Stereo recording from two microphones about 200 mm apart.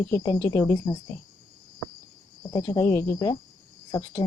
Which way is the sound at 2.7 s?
15° left (ahead or behind).